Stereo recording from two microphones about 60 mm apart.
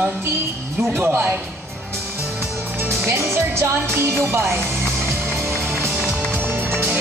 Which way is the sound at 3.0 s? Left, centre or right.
Right.